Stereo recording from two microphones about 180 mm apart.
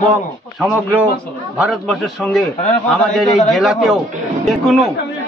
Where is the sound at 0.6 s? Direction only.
Centre (ahead or behind).